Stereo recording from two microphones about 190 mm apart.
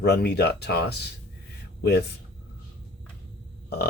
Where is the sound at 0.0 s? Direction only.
55° left (ahead or behind).